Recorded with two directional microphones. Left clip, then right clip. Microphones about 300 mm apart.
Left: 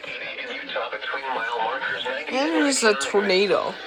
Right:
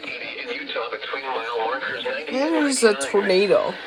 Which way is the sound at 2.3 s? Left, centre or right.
Centre.